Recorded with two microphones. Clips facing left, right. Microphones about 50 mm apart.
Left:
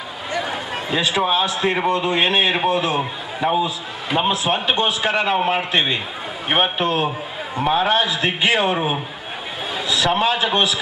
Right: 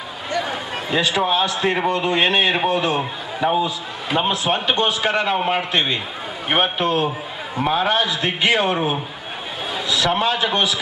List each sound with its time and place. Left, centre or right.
0.4 s a sound: centre
1.0 s a man's voice: centre
1.6 s a man's voice: centre